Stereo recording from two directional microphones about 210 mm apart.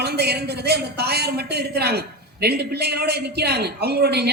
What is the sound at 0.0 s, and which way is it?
A woman's voice, 50° right (ahead or behind).